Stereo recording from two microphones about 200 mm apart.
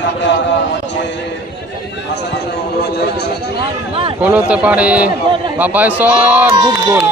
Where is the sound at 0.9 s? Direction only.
60° left (ahead or behind).